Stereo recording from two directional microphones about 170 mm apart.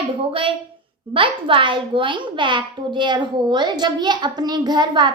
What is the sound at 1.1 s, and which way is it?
A woman's voice, 30° right (ahead or behind).